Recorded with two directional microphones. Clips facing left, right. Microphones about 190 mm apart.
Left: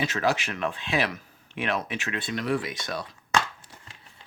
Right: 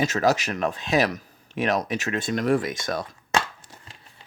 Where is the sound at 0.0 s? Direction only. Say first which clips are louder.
Right 4 dB; 40° right (ahead or behind).